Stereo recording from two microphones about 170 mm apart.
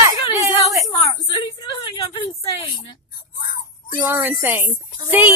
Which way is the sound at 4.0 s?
10° right (ahead or behind).